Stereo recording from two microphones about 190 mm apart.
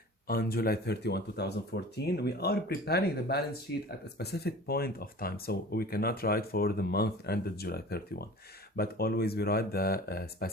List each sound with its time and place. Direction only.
0.3 s speech: 50° left (ahead or behind)